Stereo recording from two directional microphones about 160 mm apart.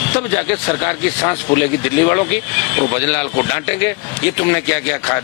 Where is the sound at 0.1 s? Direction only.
15° left (ahead or behind).